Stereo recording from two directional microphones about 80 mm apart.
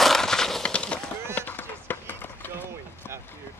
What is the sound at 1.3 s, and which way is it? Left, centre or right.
Run, left.